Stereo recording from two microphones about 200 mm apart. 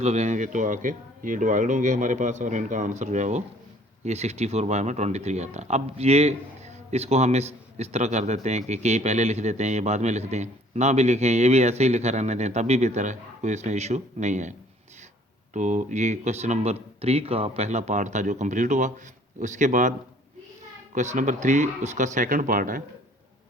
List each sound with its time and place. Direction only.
0.0 s speech: 35° right (ahead or behind)
15.5 s speech: 40° right (ahead or behind)
20.9 s speech: 35° right (ahead or behind)